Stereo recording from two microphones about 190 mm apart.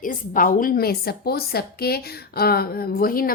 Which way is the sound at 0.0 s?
45° left (ahead or behind).